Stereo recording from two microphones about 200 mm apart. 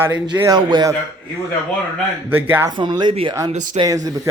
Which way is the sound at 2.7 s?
20° right (ahead or behind).